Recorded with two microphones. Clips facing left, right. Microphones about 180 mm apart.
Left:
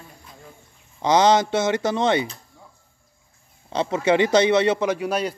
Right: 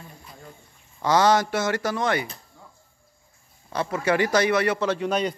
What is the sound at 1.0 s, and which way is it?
Speech, 20° left (ahead or behind).